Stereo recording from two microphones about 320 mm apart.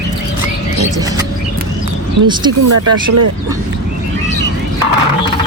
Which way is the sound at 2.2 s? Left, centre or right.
Centre.